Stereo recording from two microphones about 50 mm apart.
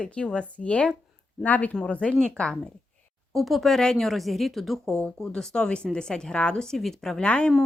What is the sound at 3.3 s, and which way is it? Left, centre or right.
Speech, centre.